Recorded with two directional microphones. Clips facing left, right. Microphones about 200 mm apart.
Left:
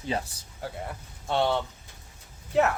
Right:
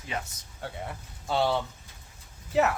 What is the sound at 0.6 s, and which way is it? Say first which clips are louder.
Speech: left 1 dB; centre (ahead or behind).